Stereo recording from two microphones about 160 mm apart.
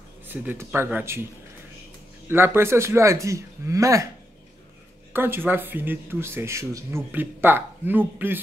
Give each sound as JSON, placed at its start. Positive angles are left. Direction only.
{"t": 0.3, "sound": "speech", "side_deg": -10}
{"t": 2.2, "sound": "speech", "side_deg": -15}
{"t": 5.1, "sound": "speech", "side_deg": -15}